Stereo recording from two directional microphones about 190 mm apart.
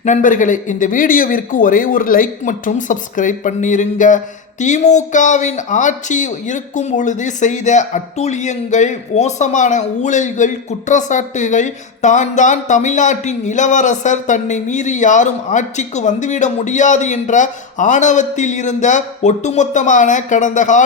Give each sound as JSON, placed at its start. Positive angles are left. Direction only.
{"t": 0.0, "sound": "speech", "side_deg": 40}